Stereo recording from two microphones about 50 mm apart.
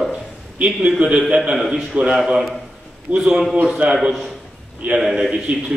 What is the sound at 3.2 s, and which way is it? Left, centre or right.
Speech, centre.